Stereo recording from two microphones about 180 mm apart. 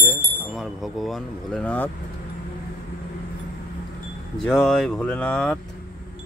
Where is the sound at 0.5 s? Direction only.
Centre (ahead or behind).